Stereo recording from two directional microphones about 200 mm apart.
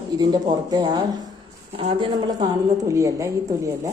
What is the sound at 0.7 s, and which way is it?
A woman's voice, 20° right (ahead or behind).